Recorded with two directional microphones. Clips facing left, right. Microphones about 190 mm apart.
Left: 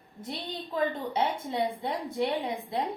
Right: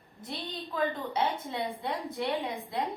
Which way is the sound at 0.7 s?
30° left (ahead or behind).